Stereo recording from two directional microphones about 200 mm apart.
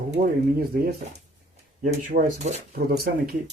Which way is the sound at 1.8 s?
40° right (ahead or behind).